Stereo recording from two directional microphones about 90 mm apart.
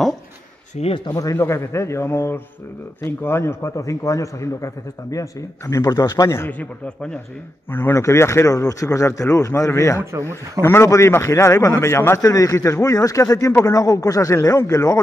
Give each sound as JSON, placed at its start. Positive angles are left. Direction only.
{"t": 1.0, "sound": "speech", "side_deg": 40}
{"t": 7.7, "sound": "speech", "side_deg": 25}
{"t": 12.2, "sound": "speech", "side_deg": 40}